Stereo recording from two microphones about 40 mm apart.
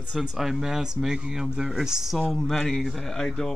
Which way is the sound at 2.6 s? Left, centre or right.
Centre.